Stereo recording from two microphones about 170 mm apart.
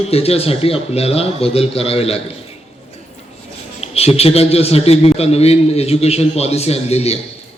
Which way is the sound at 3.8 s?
35° left (ahead or behind).